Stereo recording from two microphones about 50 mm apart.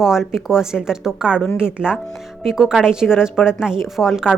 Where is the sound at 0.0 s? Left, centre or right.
Centre.